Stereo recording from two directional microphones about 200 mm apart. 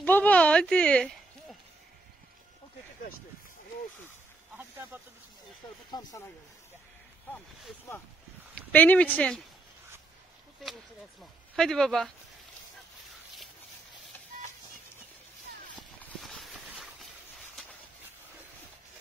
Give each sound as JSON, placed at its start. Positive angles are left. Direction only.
{"t": 0.0, "sound": "a sound", "side_deg": 10}
{"t": 4.6, "sound": "speech", "side_deg": -10}
{"t": 5.9, "sound": "speech", "side_deg": 20}
{"t": 8.7, "sound": "speech", "side_deg": 10}
{"t": 11.5, "sound": "speech", "side_deg": 0}
{"t": 16.0, "sound": "a sound", "side_deg": 0}